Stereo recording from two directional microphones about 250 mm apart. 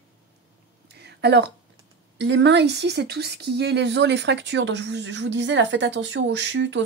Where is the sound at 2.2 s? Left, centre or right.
Right.